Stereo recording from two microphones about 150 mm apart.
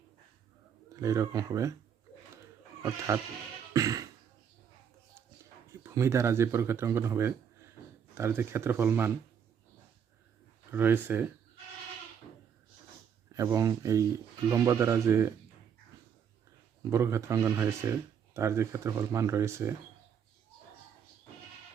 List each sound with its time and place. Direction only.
1.0 s speech: 20° right (ahead or behind)
3.7 s beatboxing: 25° right (ahead or behind)
5.8 s speech: 20° right (ahead or behind)
10.7 s speech: 15° right (ahead or behind)
13.3 s speech: 20° right (ahead or behind)
16.9 s speech: 20° right (ahead or behind)